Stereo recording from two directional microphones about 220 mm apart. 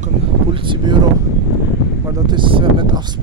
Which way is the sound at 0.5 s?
20° right (ahead or behind).